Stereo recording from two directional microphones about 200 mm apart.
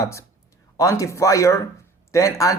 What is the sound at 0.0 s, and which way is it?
Speech, 15° left (ahead or behind).